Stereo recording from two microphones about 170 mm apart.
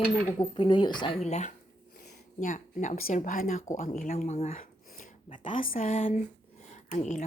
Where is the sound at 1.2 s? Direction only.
40° left (ahead or behind).